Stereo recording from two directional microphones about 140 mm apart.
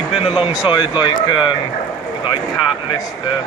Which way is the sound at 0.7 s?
30° left (ahead or behind).